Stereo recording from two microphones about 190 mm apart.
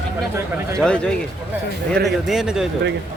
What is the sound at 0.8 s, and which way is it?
Speech, 5° left (ahead or behind).